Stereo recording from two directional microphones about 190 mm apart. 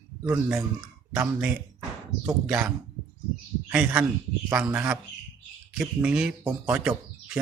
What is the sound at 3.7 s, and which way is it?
A man's voice, 5° right (ahead or behind).